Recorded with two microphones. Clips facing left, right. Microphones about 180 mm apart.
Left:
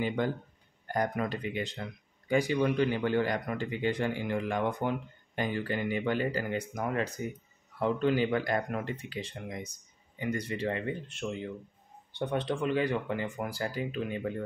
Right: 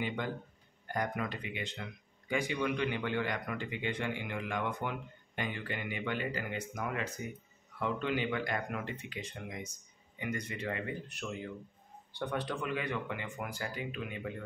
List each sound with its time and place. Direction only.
0.0 s speech: 40° left (ahead or behind)